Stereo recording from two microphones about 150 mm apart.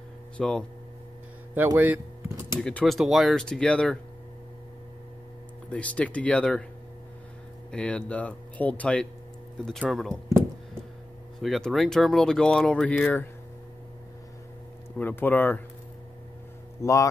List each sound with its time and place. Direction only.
0.4 s speech: 5° left (ahead or behind)
1.8 s a sound: 15° right (ahead or behind)
2.6 s speech: 5° left (ahead or behind)
5.7 s speech: 10° left (ahead or behind)
7.7 s speech: 10° left (ahead or behind)
11.3 s speech: centre (ahead or behind)
15.0 s speech: 10° left (ahead or behind)
16.8 s speech: 20° left (ahead or behind)